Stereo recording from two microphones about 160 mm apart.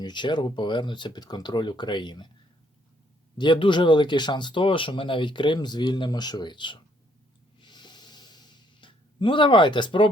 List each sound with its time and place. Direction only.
0.0 s speech: 30° left (ahead or behind)
3.3 s speech: 30° left (ahead or behind)
7.6 s snort: 30° left (ahead or behind)